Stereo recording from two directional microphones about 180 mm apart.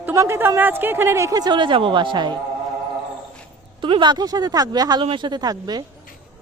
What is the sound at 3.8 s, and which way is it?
Speech, 25° right (ahead or behind).